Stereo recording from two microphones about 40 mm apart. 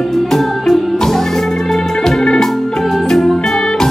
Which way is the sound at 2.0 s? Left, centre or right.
Centre.